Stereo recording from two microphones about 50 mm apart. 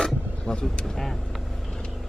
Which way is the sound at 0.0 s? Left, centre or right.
Centre.